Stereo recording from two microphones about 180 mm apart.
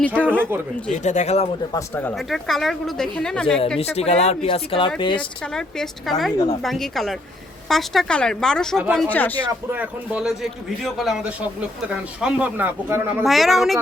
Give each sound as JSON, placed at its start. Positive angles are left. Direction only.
{"t": 0.2, "sound": "speech", "side_deg": 10}
{"t": 0.9, "sound": "speech", "side_deg": 40}
{"t": 1.7, "sound": "speech", "side_deg": 10}
{"t": 2.1, "sound": "speech", "side_deg": 0}
{"t": 3.8, "sound": "speech", "side_deg": 35}
{"t": 5.4, "sound": "speech", "side_deg": 5}
{"t": 6.3, "sound": "speech", "side_deg": 30}
{"t": 6.6, "sound": "speech", "side_deg": 0}
{"t": 9.5, "sound": "speech", "side_deg": -10}
{"t": 13.2, "sound": "speech", "side_deg": 0}